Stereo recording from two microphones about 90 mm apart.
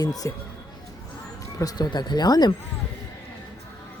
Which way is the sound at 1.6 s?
45° left (ahead or behind).